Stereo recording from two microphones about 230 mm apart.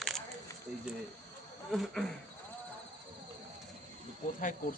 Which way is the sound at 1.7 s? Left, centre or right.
Centre.